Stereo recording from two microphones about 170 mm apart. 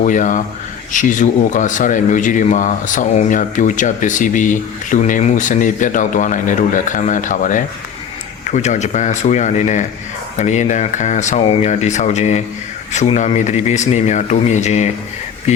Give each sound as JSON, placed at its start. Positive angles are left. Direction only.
{"t": 0.0, "sound": "speech", "side_deg": 50}